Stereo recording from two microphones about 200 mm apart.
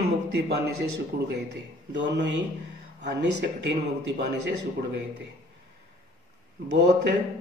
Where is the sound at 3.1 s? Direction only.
60° right (ahead or behind).